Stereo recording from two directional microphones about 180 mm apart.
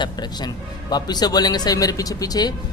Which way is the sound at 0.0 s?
25° left (ahead or behind).